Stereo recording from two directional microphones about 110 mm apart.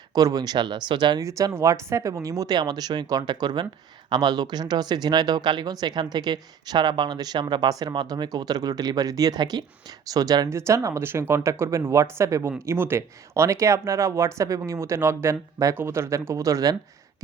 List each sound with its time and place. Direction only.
0.1 s speech: 35° right (ahead or behind)
1.2 s speech: 30° right (ahead or behind)